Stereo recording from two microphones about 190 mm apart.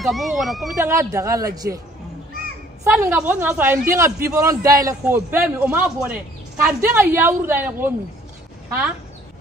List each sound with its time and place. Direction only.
0.0 s speech: centre (ahead or behind)
0.8 s a man's voice: 15° right (ahead or behind)
2.8 s a man's voice: 10° right (ahead or behind)